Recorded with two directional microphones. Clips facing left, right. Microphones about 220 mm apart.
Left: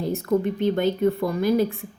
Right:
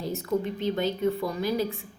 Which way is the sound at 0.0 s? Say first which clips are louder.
Left 6 dB; 55° left (ahead or behind).